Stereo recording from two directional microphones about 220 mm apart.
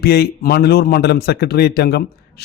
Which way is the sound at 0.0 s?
45° left (ahead or behind).